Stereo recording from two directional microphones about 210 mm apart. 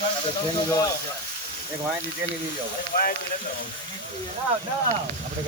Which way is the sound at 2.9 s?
50° left (ahead or behind).